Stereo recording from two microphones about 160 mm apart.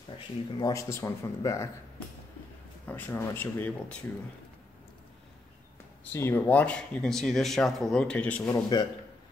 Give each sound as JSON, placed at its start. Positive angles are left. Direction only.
{"t": 0.6, "sound": "speech", "side_deg": 20}
{"t": 2.9, "sound": "speech", "side_deg": 15}
{"t": 6.1, "sound": "speech", "side_deg": 15}
{"t": 8.5, "sound": "speech", "side_deg": 25}